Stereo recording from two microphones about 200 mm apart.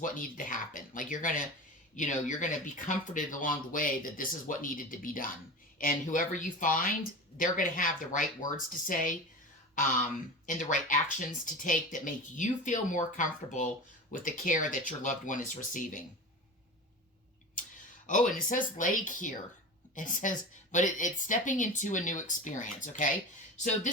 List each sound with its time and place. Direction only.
0.0 s speech: 40° left (ahead or behind)
17.6 s a sound: 40° left (ahead or behind)
18.0 s speech: 40° left (ahead or behind)